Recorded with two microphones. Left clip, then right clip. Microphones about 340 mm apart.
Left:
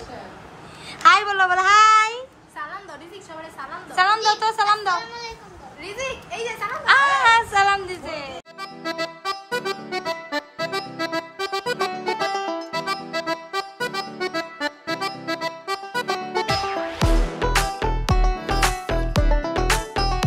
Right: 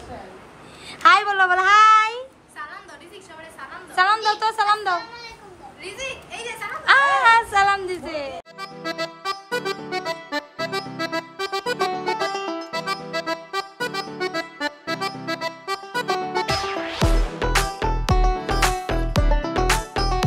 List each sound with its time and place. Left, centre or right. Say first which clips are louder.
1.0 s a sound: even; centre
3.9 s a woman's voice: left 1 dB; centre
5.9 s a child's voice: left 2 dB; centre
6.9 s music: right 1 dB; centre